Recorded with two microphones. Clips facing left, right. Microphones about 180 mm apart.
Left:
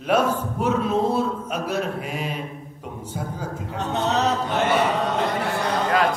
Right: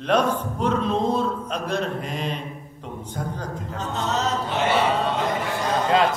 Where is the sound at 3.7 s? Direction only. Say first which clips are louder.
Left 4 dB; 65° left (ahead or behind).